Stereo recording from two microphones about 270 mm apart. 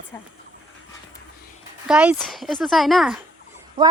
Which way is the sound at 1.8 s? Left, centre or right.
Centre.